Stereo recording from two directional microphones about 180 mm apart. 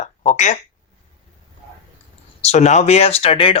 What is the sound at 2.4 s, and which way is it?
Speech, 40° left (ahead or behind).